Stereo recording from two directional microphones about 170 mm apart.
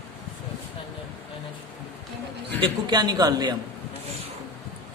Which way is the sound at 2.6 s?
25° right (ahead or behind).